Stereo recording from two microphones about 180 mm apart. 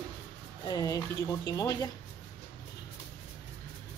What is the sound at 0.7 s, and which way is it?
A woman's voice, 20° left (ahead or behind).